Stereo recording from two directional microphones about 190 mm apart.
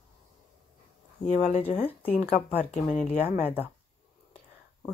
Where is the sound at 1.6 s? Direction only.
10° left (ahead or behind).